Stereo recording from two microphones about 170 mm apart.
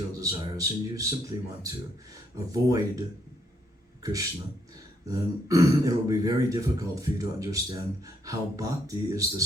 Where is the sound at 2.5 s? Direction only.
20° right (ahead or behind).